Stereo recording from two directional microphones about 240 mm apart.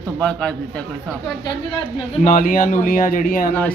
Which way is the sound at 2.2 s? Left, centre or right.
Left.